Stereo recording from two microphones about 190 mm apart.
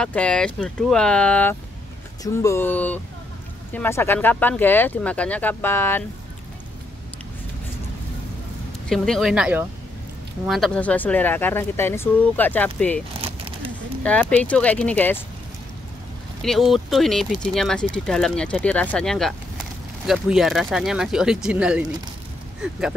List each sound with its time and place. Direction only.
0.0 s speech: 5° left (ahead or behind)
8.8 s speech: 5° left (ahead or behind)
13.2 s a sound: 30° right (ahead or behind)
14.0 s speech: 5° left (ahead or behind)
16.4 s speech: centre (ahead or behind)